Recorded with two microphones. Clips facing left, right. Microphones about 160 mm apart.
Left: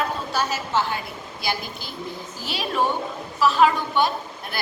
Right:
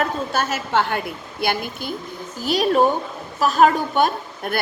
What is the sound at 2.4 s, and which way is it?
A woman's voice, 40° right (ahead or behind).